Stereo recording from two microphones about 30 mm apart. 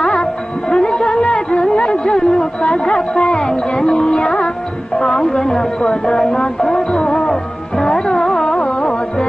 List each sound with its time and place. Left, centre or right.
0.7 s a sound: left
1.3 s music: left
2.1 s a sound: centre
2.7 s music: left
3.3 s music: centre
5.0 s a sound: centre
6.1 s speech: centre
6.7 s music: left
7.2 s music: centre
8.4 s carnatic music: centre
8.6 s music: left